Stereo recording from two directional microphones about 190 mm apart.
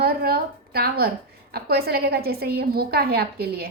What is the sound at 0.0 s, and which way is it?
A woman's voice, 55° right (ahead or behind).